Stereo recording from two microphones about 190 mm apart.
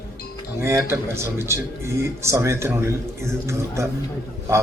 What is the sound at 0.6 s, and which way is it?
A man's voice, 15° right (ahead or behind).